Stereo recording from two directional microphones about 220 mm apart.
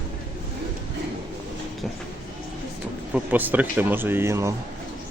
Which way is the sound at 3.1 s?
10° right (ahead or behind).